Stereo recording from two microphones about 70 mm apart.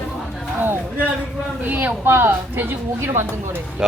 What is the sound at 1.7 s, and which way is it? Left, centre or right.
Speech, right.